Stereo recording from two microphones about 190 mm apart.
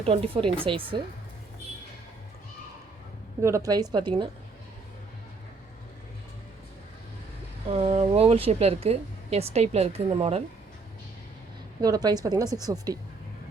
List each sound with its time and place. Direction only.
0.0 s a woman's voice: 30° right (ahead or behind)
3.4 s a woman's voice: 15° right (ahead or behind)
7.7 s speech: 35° right (ahead or behind)
11.8 s a woman's voice: 20° right (ahead or behind)